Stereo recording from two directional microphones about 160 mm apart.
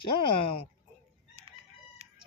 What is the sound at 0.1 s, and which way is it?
Speech, 35° left (ahead or behind).